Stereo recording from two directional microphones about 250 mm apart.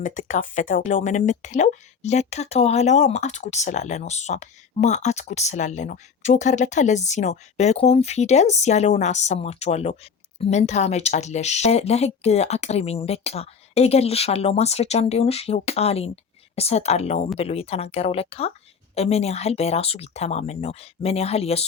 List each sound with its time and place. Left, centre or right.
0.0 s speech: left